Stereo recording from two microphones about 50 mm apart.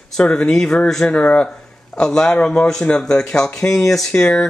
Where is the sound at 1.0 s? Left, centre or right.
Left; by 4.1 s centre.